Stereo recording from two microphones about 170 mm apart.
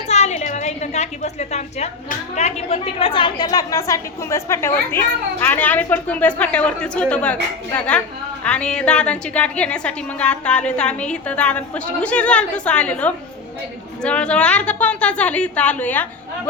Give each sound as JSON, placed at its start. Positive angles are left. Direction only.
{"t": 0.1, "sound": "a woman's voice", "side_deg": 40}